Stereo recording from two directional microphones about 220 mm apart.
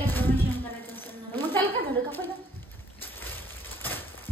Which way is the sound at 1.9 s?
10° left (ahead or behind).